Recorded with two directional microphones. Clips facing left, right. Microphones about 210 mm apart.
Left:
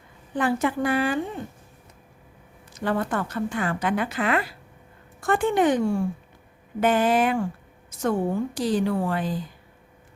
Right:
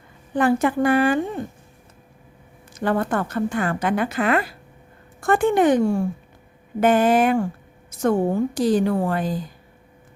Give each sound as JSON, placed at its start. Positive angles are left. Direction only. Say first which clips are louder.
{"t": 0.3, "sound": "a woman's voice", "louder": "right 5 dB", "side_deg": -50}
{"t": 2.8, "sound": "a woman's voice", "louder": "right 4 dB", "side_deg": -50}